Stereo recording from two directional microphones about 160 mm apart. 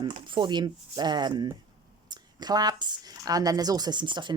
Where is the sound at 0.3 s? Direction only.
30° right (ahead or behind).